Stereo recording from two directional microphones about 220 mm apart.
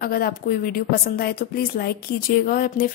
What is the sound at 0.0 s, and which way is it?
A woman's voice, 45° left (ahead or behind).